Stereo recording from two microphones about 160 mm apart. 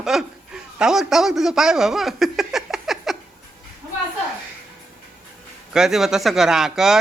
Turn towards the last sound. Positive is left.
turn(degrees=-5)  # may be behind; listen again after turning